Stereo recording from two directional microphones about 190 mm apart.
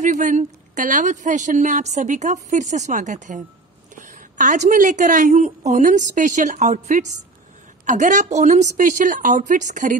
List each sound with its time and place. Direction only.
0.0 s speech: 40° right (ahead or behind)